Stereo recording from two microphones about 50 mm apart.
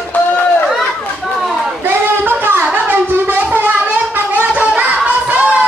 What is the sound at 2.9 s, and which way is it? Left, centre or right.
Gargling, right.